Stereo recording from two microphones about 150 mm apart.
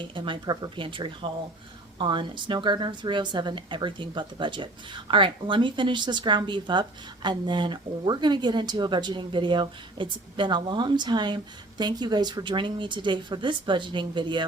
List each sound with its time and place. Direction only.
0.1 s a woman's voice: 30° right (ahead or behind)